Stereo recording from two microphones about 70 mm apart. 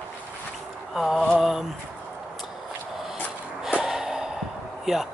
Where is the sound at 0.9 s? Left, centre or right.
Centre.